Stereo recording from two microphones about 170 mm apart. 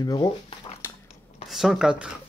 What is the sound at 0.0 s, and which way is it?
Speech, 20° left (ahead or behind).